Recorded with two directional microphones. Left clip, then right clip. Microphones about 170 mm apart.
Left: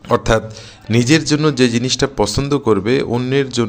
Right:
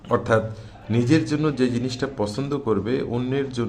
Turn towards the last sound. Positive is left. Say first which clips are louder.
# left 8 dB
turn(degrees=25)  # may be behind; listen again after turning